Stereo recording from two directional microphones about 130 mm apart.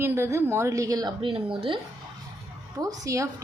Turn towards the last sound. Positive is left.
turn(degrees=-25)  # may be behind; listen again after turning